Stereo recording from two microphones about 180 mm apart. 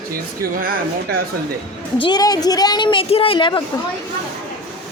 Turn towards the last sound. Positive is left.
turn(degrees=25)  # may be behind; listen again after turning